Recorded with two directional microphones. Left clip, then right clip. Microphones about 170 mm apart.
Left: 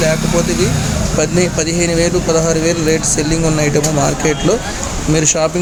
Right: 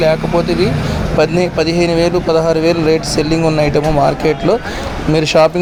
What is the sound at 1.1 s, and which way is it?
Speech, 20° right (ahead or behind).